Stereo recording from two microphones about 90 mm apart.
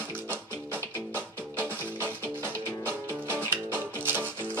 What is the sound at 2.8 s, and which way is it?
Music, 25° right (ahead or behind).